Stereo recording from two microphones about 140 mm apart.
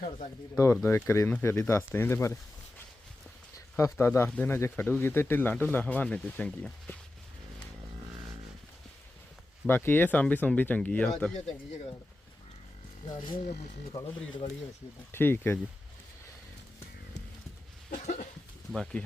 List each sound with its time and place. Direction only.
0.5 s speech: 20° left (ahead or behind)
9.6 s speech: 15° left (ahead or behind)
13.2 s speech: 45° left (ahead or behind)
14.0 s speech: 20° left (ahead or behind)
15.1 s speech: 15° left (ahead or behind)
18.0 s a sound: 60° left (ahead or behind)
18.7 s speech: 5° left (ahead or behind)